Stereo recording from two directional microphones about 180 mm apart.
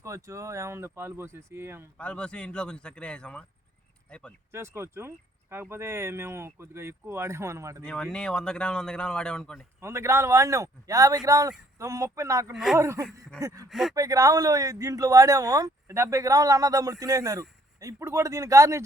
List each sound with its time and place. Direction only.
0.0 s speech: 15° right (ahead or behind)
2.0 s speech: 5° left (ahead or behind)
4.5 s speech: 15° right (ahead or behind)
7.9 s speech: 5° left (ahead or behind)
9.8 s speech: 15° right (ahead or behind)
13.7 s speech: centre (ahead or behind)
13.9 s speech: 20° right (ahead or behind)